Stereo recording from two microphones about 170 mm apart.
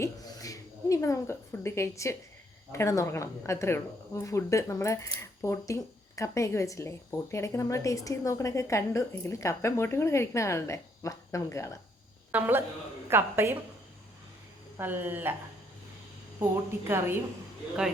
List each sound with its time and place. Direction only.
0.0 s a sound: 20° left (ahead or behind)
2.7 s speech: 15° left (ahead or behind)
12.3 s a woman's voice: 10° right (ahead or behind)
14.8 s a woman's voice: 10° right (ahead or behind)
16.4 s a woman's voice: 15° right (ahead or behind)